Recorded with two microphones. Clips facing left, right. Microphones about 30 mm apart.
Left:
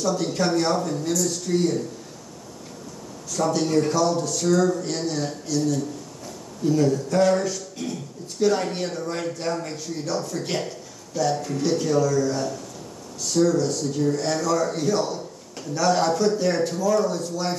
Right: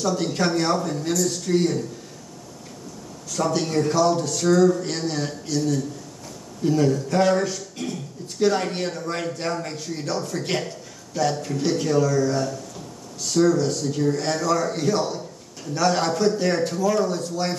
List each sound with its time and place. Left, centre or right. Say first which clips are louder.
0.0 s a man's voice: even; centre
3.3 s a man's voice: left 1 dB; centre